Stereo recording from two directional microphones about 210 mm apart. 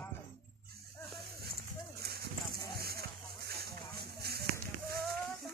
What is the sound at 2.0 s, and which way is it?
Clip-clop, 50° right (ahead or behind).